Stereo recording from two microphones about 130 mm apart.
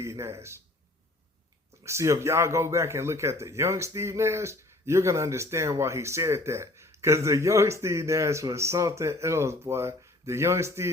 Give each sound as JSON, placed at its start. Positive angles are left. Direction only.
{"t": 0.0, "sound": "a man's voice", "side_deg": -20}
{"t": 1.8, "sound": "speech", "side_deg": -20}